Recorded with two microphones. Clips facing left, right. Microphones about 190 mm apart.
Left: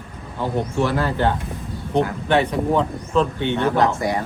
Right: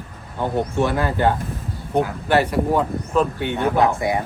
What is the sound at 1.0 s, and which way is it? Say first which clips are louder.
Speech: right 1 dB; 10° right (ahead or behind).